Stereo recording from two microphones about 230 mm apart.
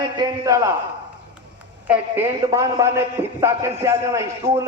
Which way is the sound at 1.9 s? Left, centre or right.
Centre.